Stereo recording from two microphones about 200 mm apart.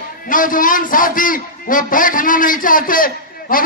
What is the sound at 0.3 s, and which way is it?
A man's voice, 40° left (ahead or behind).